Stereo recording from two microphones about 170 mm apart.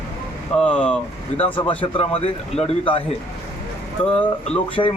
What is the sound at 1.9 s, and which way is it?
A man's voice, 35° left (ahead or behind).